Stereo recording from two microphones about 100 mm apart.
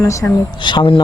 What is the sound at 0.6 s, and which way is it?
Speech, 55° left (ahead or behind).